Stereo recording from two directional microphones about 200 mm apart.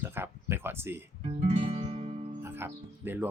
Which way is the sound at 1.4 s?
30° right (ahead or behind).